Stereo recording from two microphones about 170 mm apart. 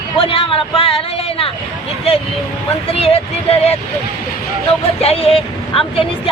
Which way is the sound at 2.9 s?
35° left (ahead or behind).